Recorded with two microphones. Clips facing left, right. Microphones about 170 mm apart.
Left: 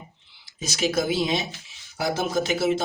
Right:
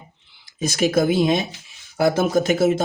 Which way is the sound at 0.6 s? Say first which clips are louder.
Right 6 dB; 55° right (ahead or behind).